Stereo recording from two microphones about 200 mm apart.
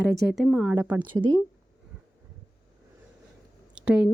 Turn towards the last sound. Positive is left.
turn(degrees=-5)  # may be behind; listen again after turning